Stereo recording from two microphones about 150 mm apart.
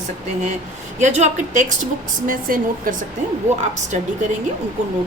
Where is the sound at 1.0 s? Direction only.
50° right (ahead or behind).